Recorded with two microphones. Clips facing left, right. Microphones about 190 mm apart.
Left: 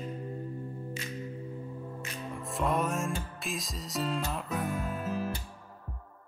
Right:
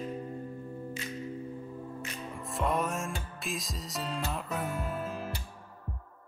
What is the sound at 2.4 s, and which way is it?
Music, centre (ahead or behind).